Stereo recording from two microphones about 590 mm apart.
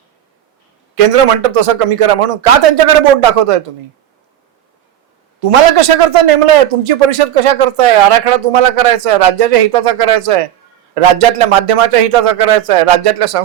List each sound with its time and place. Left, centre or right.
0.9 s a man's voice: right
5.4 s a man's voice: right